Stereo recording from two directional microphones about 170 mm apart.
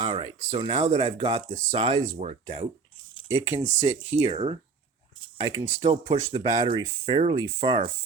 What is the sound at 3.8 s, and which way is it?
Speech, 35° right (ahead or behind).